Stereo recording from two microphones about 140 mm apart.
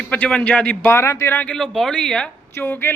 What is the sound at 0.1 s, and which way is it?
A man's voice, 10° left (ahead or behind).